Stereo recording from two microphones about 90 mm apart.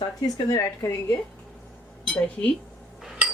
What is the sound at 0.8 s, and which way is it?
Speech, 30° left (ahead or behind).